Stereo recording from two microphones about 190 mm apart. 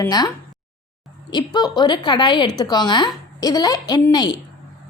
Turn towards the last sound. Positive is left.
turn(degrees=20)  # may be behind; listen again after turning